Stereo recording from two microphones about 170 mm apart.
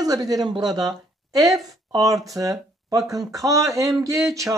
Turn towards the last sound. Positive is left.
turn(degrees=-20)  # may be behind; listen again after turning